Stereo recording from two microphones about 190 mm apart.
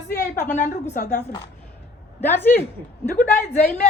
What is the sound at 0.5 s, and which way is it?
Speech, 40° left (ahead or behind).